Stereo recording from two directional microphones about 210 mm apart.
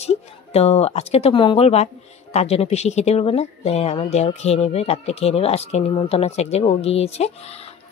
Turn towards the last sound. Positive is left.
turn(degrees=30)  # may be behind; listen again after turning